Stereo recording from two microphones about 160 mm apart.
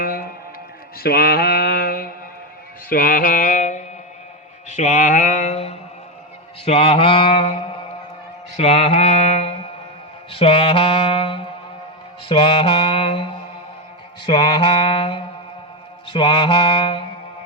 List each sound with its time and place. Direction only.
0.0 s music: 65° left (ahead or behind)
0.9 s mantra: 75° left (ahead or behind); by 17.1 s 35° left (ahead or behind)